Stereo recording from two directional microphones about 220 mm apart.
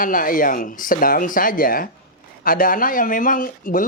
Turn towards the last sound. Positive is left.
turn(degrees=40)  # may be behind; listen again after turning